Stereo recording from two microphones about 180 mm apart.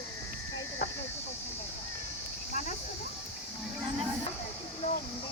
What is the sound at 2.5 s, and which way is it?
Cricket, 40° left (ahead or behind).